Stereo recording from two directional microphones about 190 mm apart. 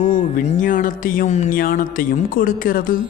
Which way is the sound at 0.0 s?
45° left (ahead or behind).